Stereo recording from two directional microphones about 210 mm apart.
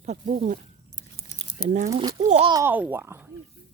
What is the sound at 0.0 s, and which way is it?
Speech, 35° right (ahead or behind).